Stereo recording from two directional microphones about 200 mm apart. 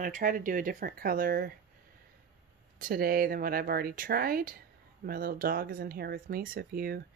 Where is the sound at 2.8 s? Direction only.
45° right (ahead or behind).